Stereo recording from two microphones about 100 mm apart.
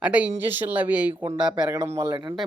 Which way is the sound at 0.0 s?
15° right (ahead or behind).